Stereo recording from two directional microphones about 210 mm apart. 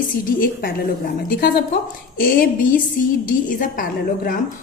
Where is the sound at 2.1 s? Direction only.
45° left (ahead or behind).